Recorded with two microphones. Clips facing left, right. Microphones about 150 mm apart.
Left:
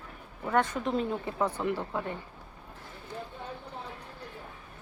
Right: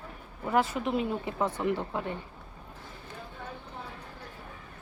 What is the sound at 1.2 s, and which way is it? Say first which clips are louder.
Speech: right 1 dB; 20° right (ahead or behind).